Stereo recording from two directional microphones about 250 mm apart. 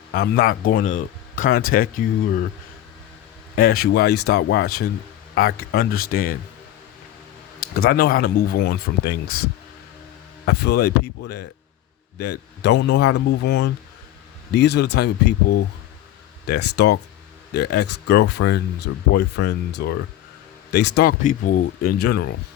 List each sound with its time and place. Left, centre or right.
0.1 s speech: left
3.5 s speech: left
7.7 s speech: left
10.4 s speech: left
12.1 s speech: left